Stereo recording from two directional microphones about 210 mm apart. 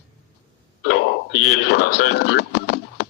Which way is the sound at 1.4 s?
50° left (ahead or behind).